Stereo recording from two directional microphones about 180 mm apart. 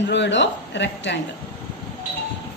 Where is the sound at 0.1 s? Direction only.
80° left.